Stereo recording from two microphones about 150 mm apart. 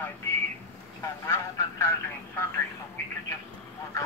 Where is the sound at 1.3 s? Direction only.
20° left (ahead or behind).